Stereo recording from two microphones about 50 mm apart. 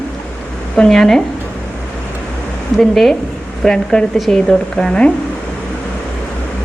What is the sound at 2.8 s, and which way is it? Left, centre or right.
Speech, centre.